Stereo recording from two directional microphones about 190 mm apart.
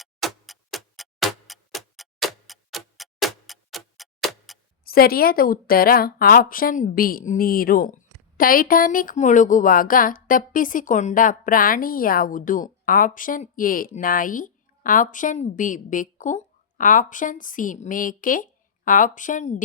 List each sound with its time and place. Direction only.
0.0 s clock: centre (ahead or behind)
4.9 s a woman's voice: 50° left (ahead or behind)